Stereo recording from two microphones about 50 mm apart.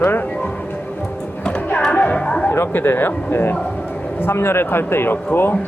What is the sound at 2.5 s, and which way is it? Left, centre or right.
Speech, left.